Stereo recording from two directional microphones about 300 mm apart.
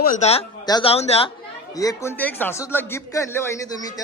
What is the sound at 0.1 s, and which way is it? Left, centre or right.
A man's voice, left.